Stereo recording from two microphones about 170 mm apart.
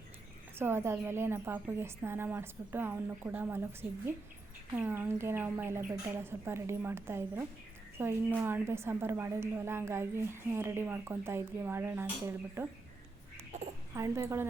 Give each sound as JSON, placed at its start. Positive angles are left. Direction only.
{"t": 0.6, "sound": "a woman's voice", "side_deg": -15}
{"t": 13.9, "sound": "a woman's voice", "side_deg": -15}